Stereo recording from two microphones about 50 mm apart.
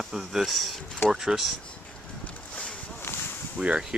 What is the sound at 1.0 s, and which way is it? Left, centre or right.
Speech, centre.